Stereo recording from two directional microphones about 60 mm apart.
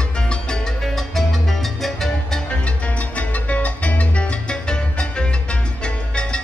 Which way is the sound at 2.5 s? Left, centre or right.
Left.